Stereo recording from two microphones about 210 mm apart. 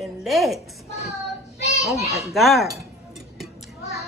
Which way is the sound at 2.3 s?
Centre (ahead or behind).